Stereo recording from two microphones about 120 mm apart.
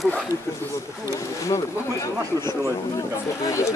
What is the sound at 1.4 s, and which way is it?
Speech, 25° left (ahead or behind).